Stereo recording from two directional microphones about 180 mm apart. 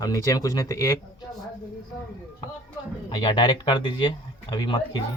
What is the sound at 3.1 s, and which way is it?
Speech, 25° left (ahead or behind).